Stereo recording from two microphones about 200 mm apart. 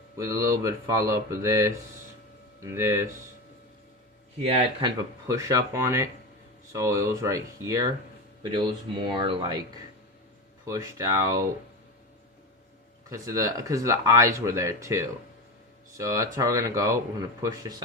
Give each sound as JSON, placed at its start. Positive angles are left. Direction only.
{"t": 0.2, "sound": "speech", "side_deg": -15}
{"t": 4.4, "sound": "speech", "side_deg": -30}
{"t": 5.3, "sound": "speech", "side_deg": -15}
{"t": 10.7, "sound": "speech", "side_deg": -15}
{"t": 13.1, "sound": "speech", "side_deg": -15}